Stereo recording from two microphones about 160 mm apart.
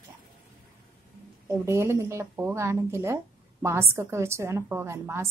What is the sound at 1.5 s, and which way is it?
A woman's voice, 15° right (ahead or behind).